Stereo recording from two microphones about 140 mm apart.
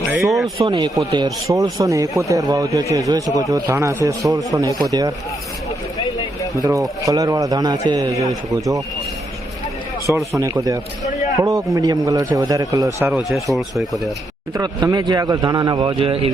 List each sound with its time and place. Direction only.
0.3 s speech: centre (ahead or behind)
0.6 s speech: 30° right (ahead or behind)
6.6 s speech: 25° right (ahead or behind)
10.3 s speech: 25° right (ahead or behind)
13.3 s speech: centre (ahead or behind)
14.5 s a man's voice: 25° right (ahead or behind); by 16.3 s 40° right (ahead or behind)